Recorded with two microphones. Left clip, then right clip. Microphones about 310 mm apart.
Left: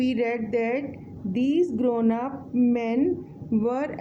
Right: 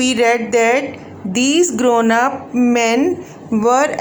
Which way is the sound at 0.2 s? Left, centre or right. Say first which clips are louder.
Right 12 dB; left.